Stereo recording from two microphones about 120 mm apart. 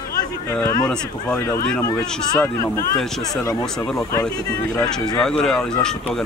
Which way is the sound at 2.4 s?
25° left (ahead or behind).